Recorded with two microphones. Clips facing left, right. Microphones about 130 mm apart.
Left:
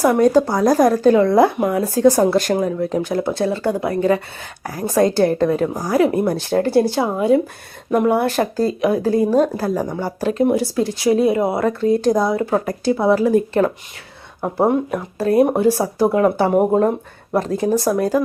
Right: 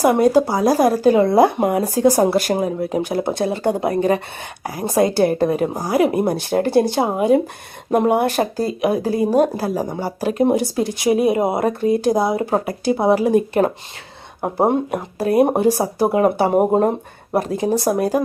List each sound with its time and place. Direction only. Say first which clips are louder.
0.0 s speech: even; 15° right (ahead or behind)
1.5 s speech: right 1 dB; 25° right (ahead or behind)
1.8 s speech: left 3 dB; 15° right (ahead or behind)
5.6 s speech: even; 30° right (ahead or behind)
5.9 s speech: left 1 dB; 20° right (ahead or behind)
12.4 s speech: left 1 dB; 30° right (ahead or behind)
12.6 s speech: even; 10° right (ahead or behind)
14.4 s speech: even; 30° right (ahead or behind)
15.2 s speech: left 1 dB; 15° right (ahead or behind)